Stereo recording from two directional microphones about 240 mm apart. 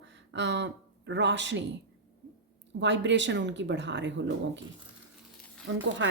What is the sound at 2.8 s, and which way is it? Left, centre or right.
A woman's voice, right.